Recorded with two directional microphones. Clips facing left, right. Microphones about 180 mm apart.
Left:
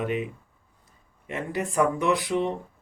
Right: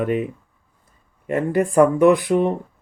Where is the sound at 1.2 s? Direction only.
50° right (ahead or behind).